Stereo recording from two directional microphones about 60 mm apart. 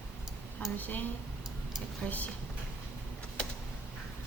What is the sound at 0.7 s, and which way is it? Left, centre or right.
A woman's voice, left.